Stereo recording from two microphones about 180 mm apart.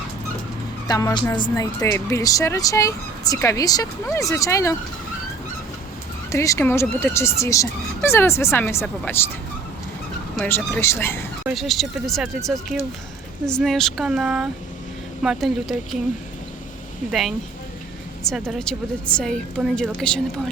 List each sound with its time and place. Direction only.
0.9 s speech: 20° left (ahead or behind)
6.3 s speech: 15° left (ahead or behind)
10.3 s speech: 10° left (ahead or behind)
11.4 s a woman's voice: centre (ahead or behind)
17.1 s a woman's voice: centre (ahead or behind)